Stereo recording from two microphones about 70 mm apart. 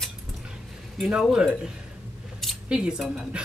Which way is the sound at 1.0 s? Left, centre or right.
Centre.